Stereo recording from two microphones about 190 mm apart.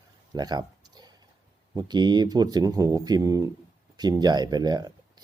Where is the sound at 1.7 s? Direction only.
20° right (ahead or behind).